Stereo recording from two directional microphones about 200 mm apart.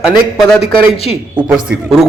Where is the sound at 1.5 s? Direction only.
5° right (ahead or behind).